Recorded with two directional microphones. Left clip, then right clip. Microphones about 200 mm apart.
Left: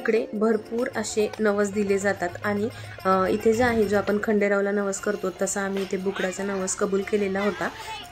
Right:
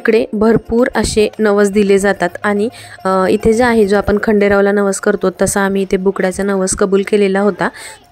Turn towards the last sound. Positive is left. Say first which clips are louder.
# right 12 dB
turn(degrees=-50)  # may be behind; listen again after turning